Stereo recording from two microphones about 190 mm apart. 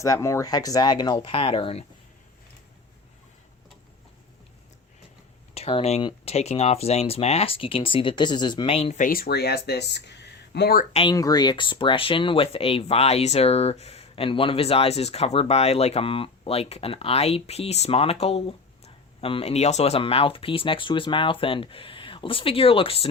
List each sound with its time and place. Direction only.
0.0 s speech: 15° left (ahead or behind)
5.5 s speech: 30° left (ahead or behind)
9.0 s speech: 50° left (ahead or behind)
10.9 s speech: 25° left (ahead or behind)